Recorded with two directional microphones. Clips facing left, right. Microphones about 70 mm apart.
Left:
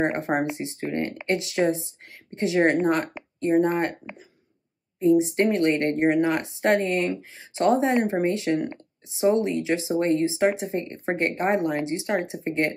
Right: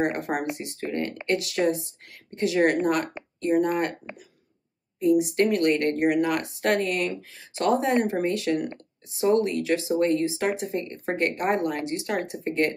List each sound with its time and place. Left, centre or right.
0.0 s a woman's voice: left
5.0 s a woman's voice: left